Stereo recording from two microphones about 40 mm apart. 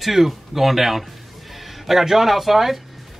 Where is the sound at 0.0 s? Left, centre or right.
Centre.